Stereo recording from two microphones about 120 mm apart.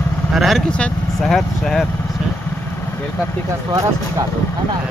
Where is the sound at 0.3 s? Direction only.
Centre (ahead or behind).